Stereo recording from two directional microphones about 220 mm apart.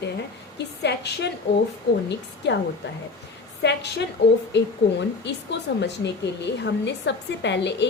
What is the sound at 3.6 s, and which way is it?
A woman's voice, 50° left (ahead or behind).